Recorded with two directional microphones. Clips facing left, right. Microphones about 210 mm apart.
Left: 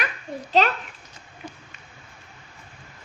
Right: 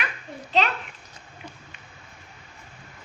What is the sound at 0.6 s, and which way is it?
Speech, 40° left (ahead or behind).